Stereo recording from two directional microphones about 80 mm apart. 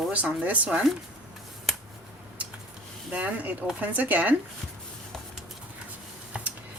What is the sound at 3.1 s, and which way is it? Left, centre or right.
Speech, centre.